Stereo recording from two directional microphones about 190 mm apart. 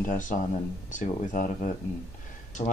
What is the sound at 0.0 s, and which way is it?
Speech, 45° left (ahead or behind).